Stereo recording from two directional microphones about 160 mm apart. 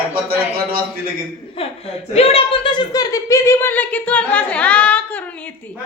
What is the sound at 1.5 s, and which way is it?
Speech, 35° left (ahead or behind).